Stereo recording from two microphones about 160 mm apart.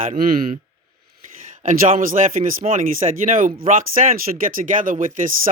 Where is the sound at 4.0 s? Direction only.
60° right (ahead or behind).